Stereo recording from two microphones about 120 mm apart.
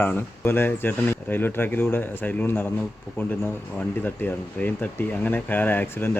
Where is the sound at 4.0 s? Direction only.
15° left (ahead or behind).